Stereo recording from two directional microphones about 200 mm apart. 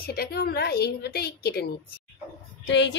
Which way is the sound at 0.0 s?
50° left (ahead or behind).